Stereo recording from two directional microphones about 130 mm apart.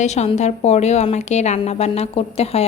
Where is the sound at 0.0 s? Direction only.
60° left (ahead or behind).